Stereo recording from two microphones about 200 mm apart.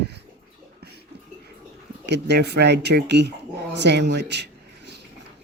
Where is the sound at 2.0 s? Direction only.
60° right (ahead or behind).